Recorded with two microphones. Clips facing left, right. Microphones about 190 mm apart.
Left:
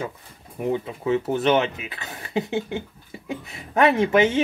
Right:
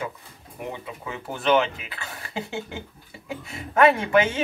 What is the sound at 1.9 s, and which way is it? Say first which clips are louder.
A man's voice: left 2 dB; 20° left (ahead or behind).